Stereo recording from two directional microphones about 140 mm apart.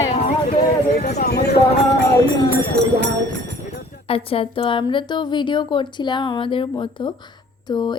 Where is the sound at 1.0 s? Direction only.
65° left (ahead or behind).